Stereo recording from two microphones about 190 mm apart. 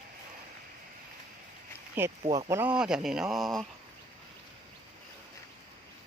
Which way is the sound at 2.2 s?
35° right (ahead or behind).